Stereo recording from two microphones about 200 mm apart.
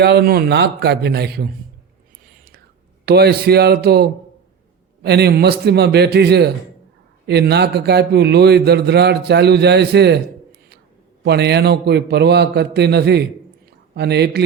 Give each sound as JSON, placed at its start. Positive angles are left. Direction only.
{"t": 0.0, "sound": "a man's voice", "side_deg": -50}
{"t": 3.1, "sound": "a man's voice", "side_deg": -50}
{"t": 11.2, "sound": "a man's voice", "side_deg": -55}